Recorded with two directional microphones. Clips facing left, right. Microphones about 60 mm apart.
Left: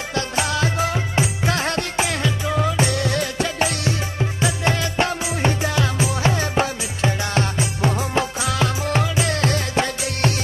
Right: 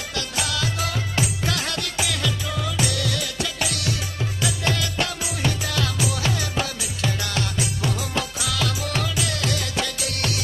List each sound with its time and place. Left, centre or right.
0.1 s music: left